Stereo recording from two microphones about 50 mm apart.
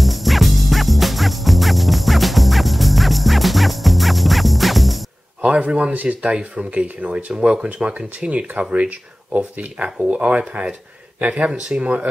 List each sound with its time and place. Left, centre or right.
0.0 s music: centre
5.4 s speech: right